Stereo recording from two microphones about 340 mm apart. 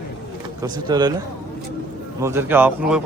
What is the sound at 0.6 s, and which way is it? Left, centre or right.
Speech, centre.